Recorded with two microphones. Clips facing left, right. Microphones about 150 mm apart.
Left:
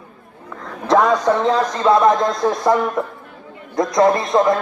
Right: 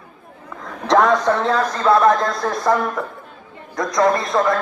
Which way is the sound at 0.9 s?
10° left (ahead or behind).